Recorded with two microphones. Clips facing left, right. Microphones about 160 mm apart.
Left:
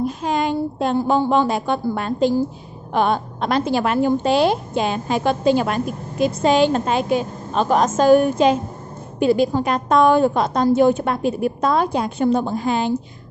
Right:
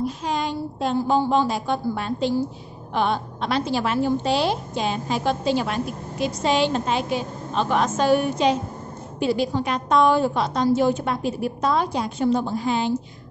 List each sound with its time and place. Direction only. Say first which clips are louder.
0.0 s a woman's voice: left 4 dB; 50° left (ahead or behind)